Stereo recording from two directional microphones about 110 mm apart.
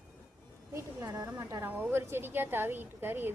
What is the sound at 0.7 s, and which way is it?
A woman's voice, 30° right (ahead or behind).